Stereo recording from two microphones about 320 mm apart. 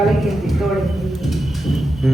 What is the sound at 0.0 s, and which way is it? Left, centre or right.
Speech, centre.